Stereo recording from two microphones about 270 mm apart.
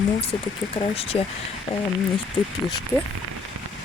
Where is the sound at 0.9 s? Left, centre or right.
Left.